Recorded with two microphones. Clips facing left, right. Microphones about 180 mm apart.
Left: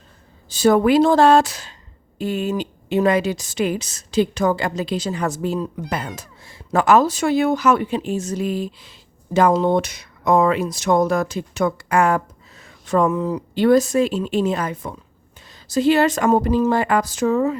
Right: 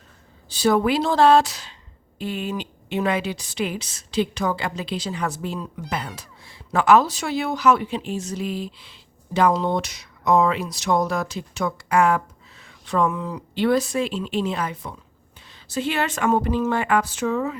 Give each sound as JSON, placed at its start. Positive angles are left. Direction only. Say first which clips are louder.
{"t": 0.5, "sound": "speech", "louder": "left 5 dB", "side_deg": 50}